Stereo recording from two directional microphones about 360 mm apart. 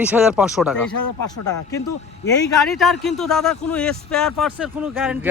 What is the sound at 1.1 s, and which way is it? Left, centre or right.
Speech, left.